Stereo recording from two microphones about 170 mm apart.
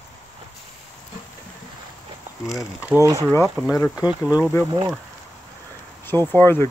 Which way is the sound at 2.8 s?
15° right (ahead or behind).